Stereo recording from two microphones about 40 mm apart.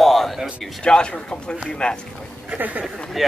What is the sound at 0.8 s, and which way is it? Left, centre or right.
Speech, left.